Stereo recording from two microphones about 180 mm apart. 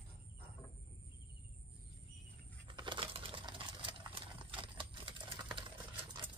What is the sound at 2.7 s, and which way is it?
Coin, 25° right (ahead or behind).